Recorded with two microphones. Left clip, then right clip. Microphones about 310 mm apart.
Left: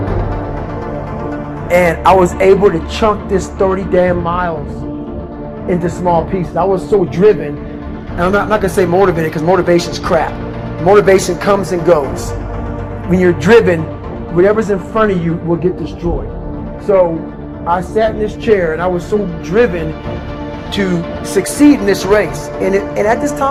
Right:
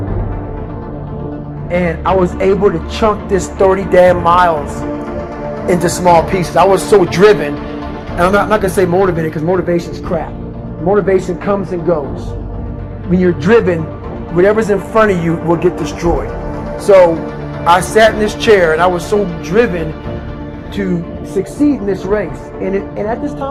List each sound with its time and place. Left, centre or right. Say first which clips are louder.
1.7 s speech: left 5 dB; left; by 4.5 s right
5.6 s a man's voice: right 4 dB; right
8.2 s speech: right 2 dB; centre; by 10.2 s left
10.8 s speech: left 4 dB; left
13.1 s speech: left 2 dB; left
14.3 s speech: right 1 dB; centre; by 15.9 s right
17.7 s speech: right 5 dB; right; by 19.9 s centre
20.7 s speech: left 3 dB; left
21.3 s speech: left 4 dB; left